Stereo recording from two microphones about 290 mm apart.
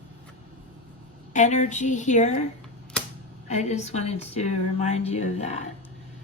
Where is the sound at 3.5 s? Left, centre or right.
Left.